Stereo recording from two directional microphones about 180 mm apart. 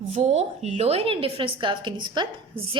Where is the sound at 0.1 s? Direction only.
35° right (ahead or behind).